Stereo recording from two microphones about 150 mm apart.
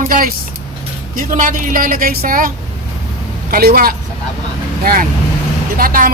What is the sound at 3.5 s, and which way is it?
A woman's voice, 80° right.